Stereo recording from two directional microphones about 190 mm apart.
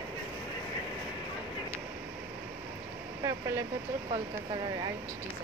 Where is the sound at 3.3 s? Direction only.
15° right (ahead or behind).